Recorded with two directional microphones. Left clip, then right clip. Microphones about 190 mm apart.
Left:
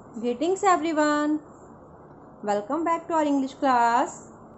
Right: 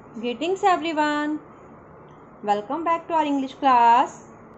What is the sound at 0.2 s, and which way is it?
A woman's voice, 20° left (ahead or behind).